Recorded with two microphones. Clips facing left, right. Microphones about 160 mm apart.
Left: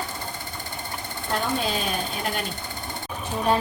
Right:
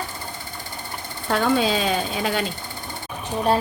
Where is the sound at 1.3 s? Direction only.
90° right.